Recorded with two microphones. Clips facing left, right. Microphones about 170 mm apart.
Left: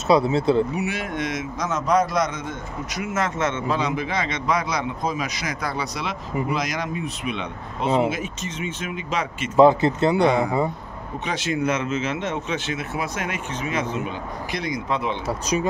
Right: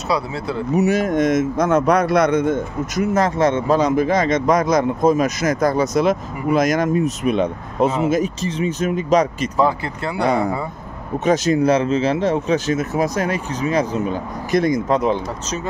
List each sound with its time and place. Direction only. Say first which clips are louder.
0.1 s speech: left 5 dB; 20° left (ahead or behind)
0.7 s a man's voice: right 10 dB; 40° right (ahead or behind)
3.1 s a man's voice: right 7 dB; 35° right (ahead or behind)
9.6 s speech: left 5 dB; 20° left (ahead or behind)
11.2 s speech: right 9 dB; 40° right (ahead or behind)